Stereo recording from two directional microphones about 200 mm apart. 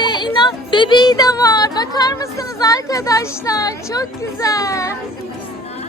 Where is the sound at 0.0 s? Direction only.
20° left (ahead or behind).